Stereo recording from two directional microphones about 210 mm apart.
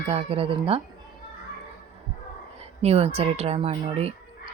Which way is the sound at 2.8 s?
30° right (ahead or behind).